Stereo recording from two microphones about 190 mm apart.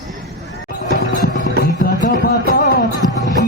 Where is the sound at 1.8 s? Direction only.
50° left (ahead or behind).